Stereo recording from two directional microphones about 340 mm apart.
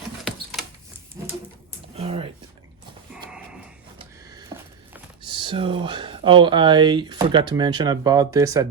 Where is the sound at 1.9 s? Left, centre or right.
Centre.